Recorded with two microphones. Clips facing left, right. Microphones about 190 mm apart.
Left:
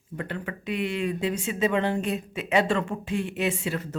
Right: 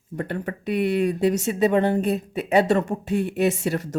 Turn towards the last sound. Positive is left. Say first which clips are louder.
# right 5 dB
turn(degrees=-45)  # may be behind; listen again after turning